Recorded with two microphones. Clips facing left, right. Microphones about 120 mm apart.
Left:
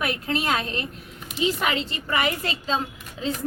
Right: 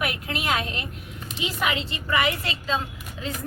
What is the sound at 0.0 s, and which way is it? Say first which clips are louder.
A woman's voice: left 3 dB; 30° left (ahead or behind).